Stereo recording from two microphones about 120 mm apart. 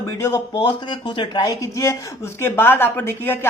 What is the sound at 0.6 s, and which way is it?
A woman's voice, 40° left (ahead or behind).